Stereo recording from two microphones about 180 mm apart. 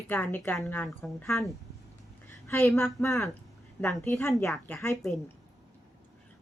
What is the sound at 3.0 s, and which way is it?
Speech, 15° left (ahead or behind).